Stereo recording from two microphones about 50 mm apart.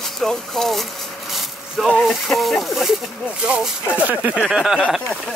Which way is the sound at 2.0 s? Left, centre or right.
Centre.